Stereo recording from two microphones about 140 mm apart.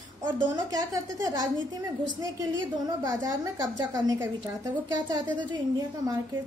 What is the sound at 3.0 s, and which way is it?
A woman's voice, 25° right (ahead or behind).